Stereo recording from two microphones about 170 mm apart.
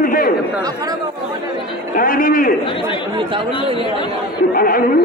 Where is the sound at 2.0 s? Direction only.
55° left (ahead or behind).